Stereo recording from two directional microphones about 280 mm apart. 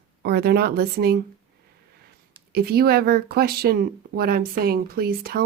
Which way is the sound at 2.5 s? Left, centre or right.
Right.